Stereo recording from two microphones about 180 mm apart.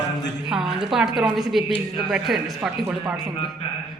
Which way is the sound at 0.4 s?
Centre (ahead or behind).